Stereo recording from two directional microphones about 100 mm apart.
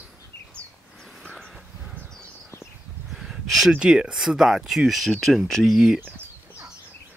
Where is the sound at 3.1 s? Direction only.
Centre (ahead or behind).